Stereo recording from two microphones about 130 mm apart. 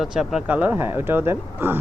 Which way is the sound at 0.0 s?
5° right (ahead or behind).